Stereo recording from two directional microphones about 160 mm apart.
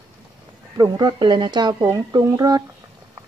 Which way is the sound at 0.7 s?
25° right (ahead or behind).